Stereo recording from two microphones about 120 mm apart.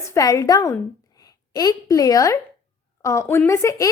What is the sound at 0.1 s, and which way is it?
A woman's voice, 25° left (ahead or behind).